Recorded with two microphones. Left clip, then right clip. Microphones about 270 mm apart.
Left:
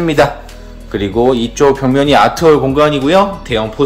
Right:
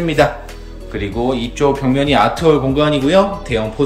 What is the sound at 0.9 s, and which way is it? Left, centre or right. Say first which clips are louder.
Speech: left 7 dB; left.